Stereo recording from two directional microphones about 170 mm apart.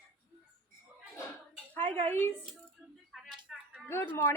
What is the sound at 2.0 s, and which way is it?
Speech, 15° left (ahead or behind).